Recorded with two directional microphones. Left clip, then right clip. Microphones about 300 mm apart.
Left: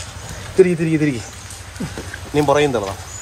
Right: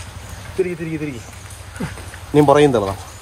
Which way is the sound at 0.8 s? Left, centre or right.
Left.